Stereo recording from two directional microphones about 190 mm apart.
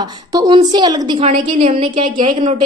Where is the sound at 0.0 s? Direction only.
20° right (ahead or behind).